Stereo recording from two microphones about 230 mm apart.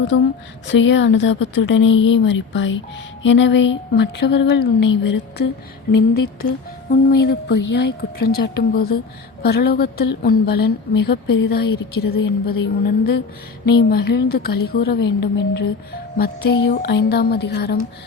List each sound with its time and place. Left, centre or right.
0.1 s a woman's voice: left
6.9 s a woman's voice: left